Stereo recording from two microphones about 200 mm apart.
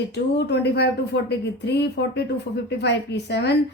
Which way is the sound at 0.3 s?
55° left (ahead or behind).